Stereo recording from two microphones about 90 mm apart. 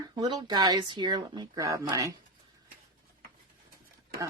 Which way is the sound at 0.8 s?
60° right (ahead or behind).